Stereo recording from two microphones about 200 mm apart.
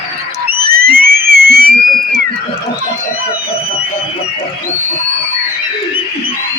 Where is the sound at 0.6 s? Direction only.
50° right (ahead or behind).